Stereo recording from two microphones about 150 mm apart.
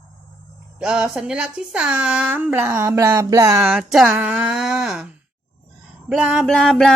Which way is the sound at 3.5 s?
5° right (ahead or behind).